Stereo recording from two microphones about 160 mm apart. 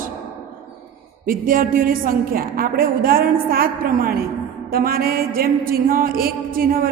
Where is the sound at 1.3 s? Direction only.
60° right (ahead or behind).